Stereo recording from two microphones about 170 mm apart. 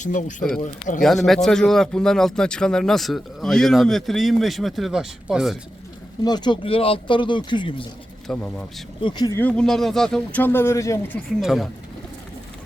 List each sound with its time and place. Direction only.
0.0 s speech: 45° left (ahead or behind)
1.0 s speech: centre (ahead or behind)
6.2 s speech: 25° left (ahead or behind)
8.3 s speech: 5° left (ahead or behind)
9.0 s speech: 25° left (ahead or behind)
9.4 s speech: 5° left (ahead or behind)
11.3 s speech: centre (ahead or behind)